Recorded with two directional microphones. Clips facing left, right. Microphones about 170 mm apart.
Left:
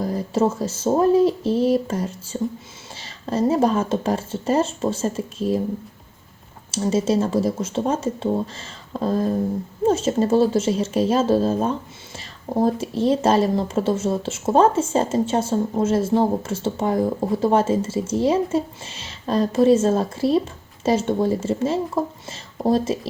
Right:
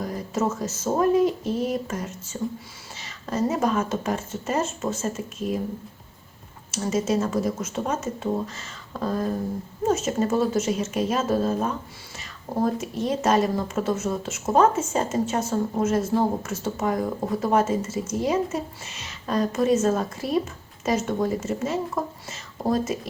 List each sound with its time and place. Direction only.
0.0 s speech: 30° left (ahead or behind)
6.7 s speech: 30° left (ahead or behind)